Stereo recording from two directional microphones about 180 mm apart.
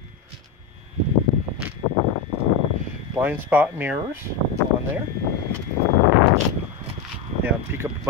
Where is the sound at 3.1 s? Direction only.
10° right (ahead or behind).